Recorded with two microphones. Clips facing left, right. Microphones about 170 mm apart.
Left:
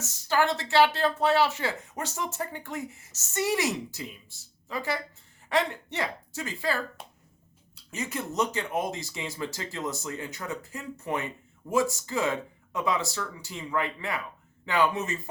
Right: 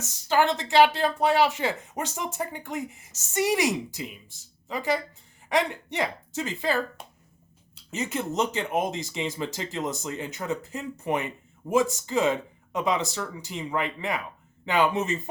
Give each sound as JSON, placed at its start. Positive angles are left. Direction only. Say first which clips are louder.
{"t": 0.0, "sound": "speech", "louder": "right 3 dB", "side_deg": -15}
{"t": 7.9, "sound": "speech", "louder": "right 4 dB", "side_deg": -20}